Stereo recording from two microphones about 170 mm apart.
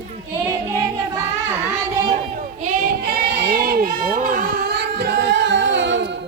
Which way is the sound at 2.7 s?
65° right (ahead or behind).